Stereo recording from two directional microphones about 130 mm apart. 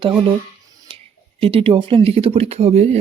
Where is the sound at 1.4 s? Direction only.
45° right (ahead or behind).